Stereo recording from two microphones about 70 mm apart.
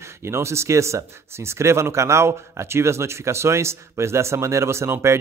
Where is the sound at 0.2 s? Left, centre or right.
Right.